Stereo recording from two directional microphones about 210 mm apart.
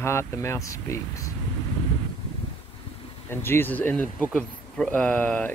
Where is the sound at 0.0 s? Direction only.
10° left (ahead or behind).